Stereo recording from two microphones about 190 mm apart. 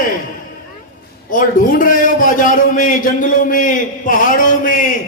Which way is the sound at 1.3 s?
45° left (ahead or behind).